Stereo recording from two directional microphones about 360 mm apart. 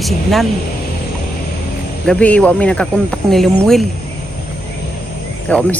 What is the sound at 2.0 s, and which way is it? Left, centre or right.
Speech, centre.